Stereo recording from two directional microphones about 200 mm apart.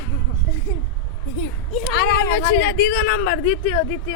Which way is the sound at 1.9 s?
60° left (ahead or behind).